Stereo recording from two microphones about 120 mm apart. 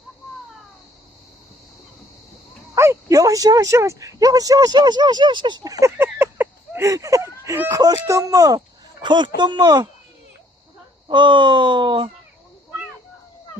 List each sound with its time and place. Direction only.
2.7 s speech: 25° right (ahead or behind); by 5.7 s 40° right (ahead or behind)
5.8 s a sound: 20° right (ahead or behind)
7.9 s speech: 25° right (ahead or behind)
11.1 s speech: 40° right (ahead or behind)